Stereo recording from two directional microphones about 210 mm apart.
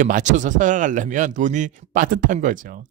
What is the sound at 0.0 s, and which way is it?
Speech, 35° right (ahead or behind).